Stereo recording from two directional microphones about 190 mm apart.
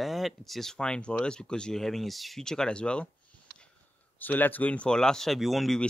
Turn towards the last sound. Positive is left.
turn(degrees=0)  # may be behind; listen again after turning